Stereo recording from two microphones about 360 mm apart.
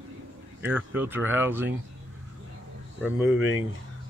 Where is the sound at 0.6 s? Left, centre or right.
Centre.